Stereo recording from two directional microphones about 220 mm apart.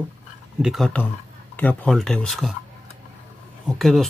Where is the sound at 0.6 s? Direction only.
Centre (ahead or behind).